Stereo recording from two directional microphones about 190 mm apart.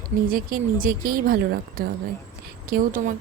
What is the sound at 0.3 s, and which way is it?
Speech, 50° right (ahead or behind).